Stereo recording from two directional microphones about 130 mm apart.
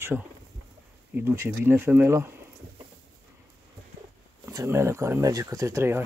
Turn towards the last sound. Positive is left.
turn(degrees=-20)  # may be behind; listen again after turning